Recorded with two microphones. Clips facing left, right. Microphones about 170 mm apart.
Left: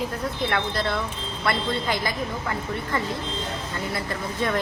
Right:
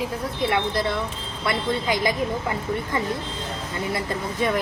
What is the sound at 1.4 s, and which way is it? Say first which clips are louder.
Speech: right 1 dB; 15° right (ahead or behind).